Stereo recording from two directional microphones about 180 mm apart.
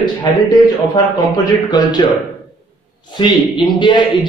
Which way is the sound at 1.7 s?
20° left (ahead or behind).